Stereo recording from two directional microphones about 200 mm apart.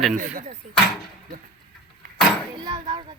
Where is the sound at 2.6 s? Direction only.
25° right (ahead or behind).